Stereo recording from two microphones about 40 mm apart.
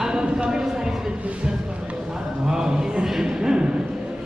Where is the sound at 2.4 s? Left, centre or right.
Centre.